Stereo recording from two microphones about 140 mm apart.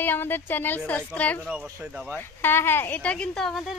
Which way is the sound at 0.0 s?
15° left (ahead or behind).